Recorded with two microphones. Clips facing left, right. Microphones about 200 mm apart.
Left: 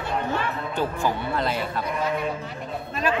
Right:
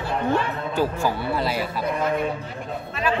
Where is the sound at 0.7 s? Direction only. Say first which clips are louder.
Right 3 dB; 10° right (ahead or behind).